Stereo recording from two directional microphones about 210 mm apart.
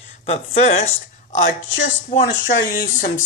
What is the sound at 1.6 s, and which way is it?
Speech, 65° left (ahead or behind).